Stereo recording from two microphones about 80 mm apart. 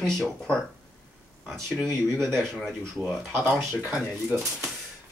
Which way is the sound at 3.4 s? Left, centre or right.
Right.